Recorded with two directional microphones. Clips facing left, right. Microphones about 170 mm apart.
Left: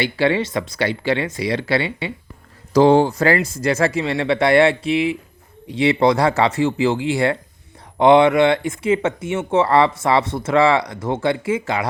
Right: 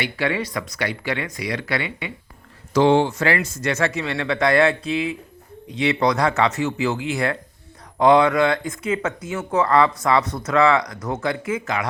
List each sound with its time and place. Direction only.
0.0 s speech: 30° left (ahead or behind)